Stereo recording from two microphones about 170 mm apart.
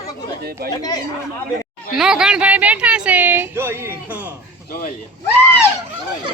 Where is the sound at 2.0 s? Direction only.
5° right (ahead or behind).